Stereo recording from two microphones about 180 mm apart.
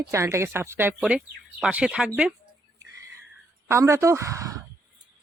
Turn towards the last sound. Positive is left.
turn(degrees=-20)  # may be behind; listen again after turning